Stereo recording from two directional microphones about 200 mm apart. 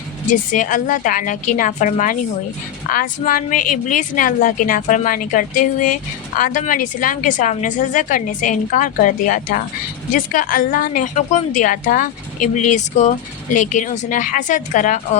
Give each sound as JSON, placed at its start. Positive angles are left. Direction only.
{"t": 0.3, "sound": "a woman's voice", "side_deg": 40}